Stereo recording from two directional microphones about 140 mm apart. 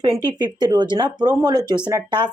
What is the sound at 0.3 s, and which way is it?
Speech, 30° right (ahead or behind).